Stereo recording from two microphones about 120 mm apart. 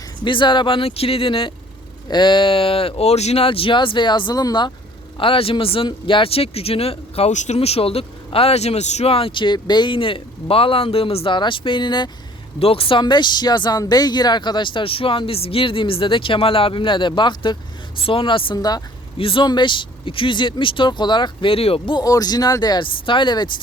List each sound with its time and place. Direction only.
0.3 s speech: 40° left (ahead or behind)
5.2 s speech: 50° left (ahead or behind)
12.5 s speech: 50° left (ahead or behind); by 18.8 s 35° left (ahead or behind)
19.1 s speech: 45° left (ahead or behind)
21.9 s speech: 30° left (ahead or behind)